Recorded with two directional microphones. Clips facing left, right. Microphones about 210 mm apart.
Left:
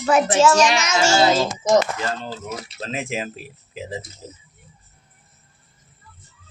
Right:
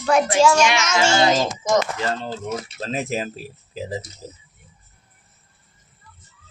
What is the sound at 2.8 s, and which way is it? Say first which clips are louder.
Speech: right 1 dB; 40° right (ahead or behind).